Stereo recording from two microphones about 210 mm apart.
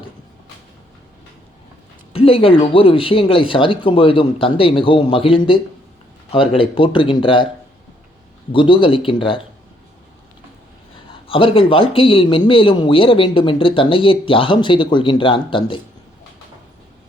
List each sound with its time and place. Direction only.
2.1 s a man's voice: 25° left (ahead or behind)
8.5 s a man's voice: 25° left (ahead or behind)
11.1 s a man's voice: 25° left (ahead or behind)